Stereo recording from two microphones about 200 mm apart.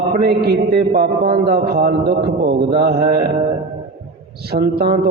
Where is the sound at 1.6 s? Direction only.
50° right (ahead or behind).